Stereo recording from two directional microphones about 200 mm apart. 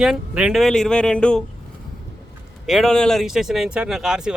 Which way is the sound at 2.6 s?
Centre (ahead or behind).